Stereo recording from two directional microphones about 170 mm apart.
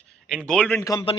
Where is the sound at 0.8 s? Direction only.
20° left (ahead or behind).